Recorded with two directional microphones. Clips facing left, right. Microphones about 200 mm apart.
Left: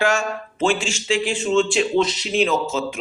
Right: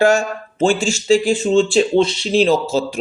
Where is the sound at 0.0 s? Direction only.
35° right (ahead or behind).